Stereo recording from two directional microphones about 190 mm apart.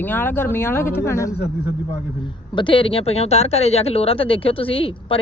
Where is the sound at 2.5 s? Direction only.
25° left (ahead or behind).